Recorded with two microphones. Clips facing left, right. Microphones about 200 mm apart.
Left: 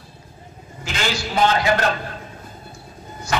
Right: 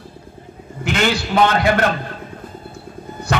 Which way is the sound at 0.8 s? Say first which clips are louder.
Right 6 dB; 60° right (ahead or behind).